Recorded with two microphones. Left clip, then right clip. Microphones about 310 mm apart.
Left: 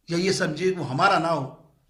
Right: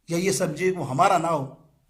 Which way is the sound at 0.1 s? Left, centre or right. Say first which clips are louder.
Even; centre.